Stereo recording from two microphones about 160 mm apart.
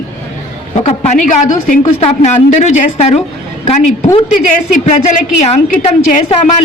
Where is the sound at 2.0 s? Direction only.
45° left (ahead or behind).